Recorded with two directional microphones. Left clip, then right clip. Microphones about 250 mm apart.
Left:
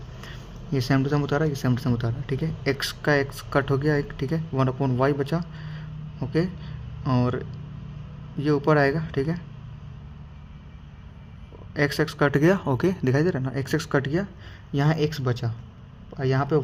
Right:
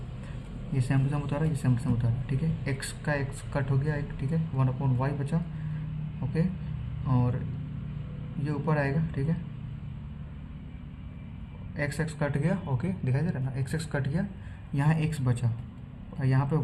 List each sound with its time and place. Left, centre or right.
0.7 s a man's voice: left
7.1 s a man's voice: left
8.4 s a man's voice: left
11.9 s a man's voice: left